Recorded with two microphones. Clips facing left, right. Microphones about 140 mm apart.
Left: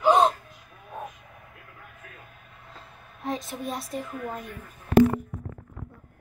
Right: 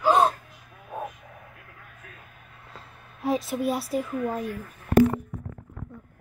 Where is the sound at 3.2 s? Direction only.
5° right (ahead or behind).